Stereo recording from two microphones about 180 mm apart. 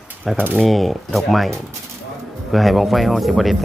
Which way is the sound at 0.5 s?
Centre (ahead or behind).